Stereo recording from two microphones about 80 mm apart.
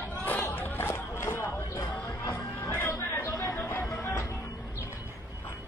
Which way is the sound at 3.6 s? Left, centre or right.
Left.